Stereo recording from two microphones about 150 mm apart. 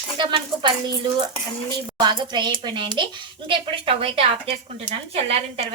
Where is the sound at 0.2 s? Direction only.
30° right (ahead or behind).